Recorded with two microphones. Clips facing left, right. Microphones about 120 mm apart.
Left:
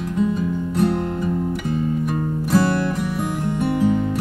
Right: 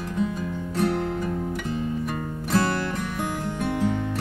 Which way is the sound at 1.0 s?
10° left (ahead or behind).